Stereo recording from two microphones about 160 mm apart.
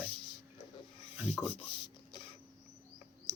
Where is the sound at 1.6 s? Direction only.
30° left (ahead or behind).